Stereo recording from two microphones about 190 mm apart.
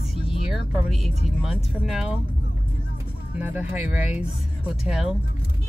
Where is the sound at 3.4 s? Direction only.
10° right (ahead or behind).